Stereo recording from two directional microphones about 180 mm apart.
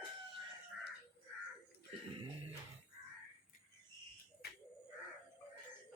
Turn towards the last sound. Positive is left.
turn(degrees=60)  # may be behind; listen again after turning